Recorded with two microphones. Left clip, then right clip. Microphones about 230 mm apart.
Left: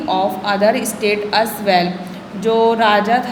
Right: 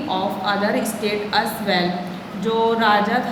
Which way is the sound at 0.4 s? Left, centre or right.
Left.